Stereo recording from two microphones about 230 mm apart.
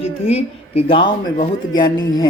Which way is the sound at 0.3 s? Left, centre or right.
Left.